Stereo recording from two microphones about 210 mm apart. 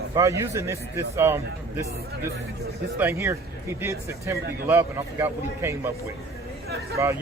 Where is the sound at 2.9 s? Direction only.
10° right (ahead or behind).